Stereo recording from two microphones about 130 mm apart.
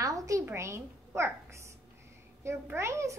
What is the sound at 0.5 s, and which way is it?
A woman's voice, 20° right (ahead or behind).